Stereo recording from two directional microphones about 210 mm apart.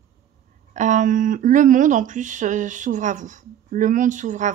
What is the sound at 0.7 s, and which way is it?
Speech, 35° right (ahead or behind).